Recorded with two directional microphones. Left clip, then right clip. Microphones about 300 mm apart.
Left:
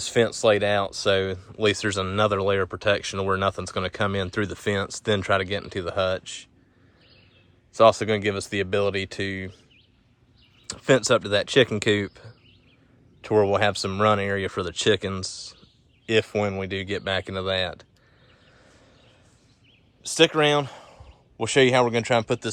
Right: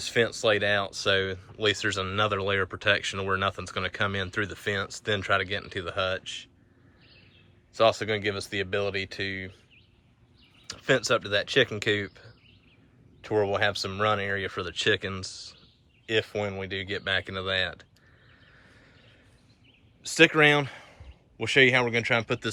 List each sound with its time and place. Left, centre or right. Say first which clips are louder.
0.0 s speech: left 4 dB; centre
7.7 s speech: left 6 dB; centre
10.7 s speech: left 5 dB; centre
20.0 s speech: even; centre